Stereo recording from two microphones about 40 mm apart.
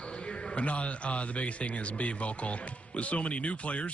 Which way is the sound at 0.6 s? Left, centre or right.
Left.